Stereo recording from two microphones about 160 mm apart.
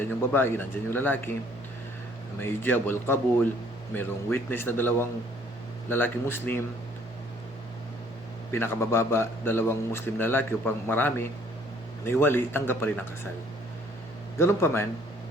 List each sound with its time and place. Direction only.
0.0 s a man's voice: 15° left (ahead or behind)
2.4 s a man's voice: 15° left (ahead or behind)
8.5 s a man's voice: 15° left (ahead or behind)
14.3 s a man's voice: 15° left (ahead or behind)